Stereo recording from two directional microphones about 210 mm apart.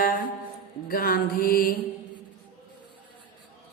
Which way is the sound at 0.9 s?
45° left (ahead or behind).